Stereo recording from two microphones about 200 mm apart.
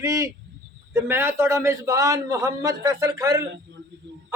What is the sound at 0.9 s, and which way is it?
A man's voice, 10° right (ahead or behind).